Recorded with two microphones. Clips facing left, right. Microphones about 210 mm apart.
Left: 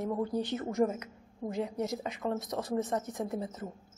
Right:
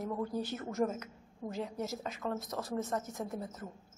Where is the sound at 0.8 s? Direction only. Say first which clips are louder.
Left 3 dB; 5° left (ahead or behind).